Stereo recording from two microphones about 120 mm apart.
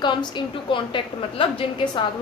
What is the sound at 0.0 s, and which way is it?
A woman's voice, 40° left (ahead or behind).